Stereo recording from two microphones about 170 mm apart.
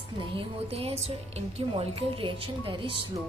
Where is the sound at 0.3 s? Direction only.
35° right (ahead or behind).